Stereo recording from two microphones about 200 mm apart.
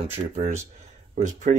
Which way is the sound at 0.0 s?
35° right (ahead or behind).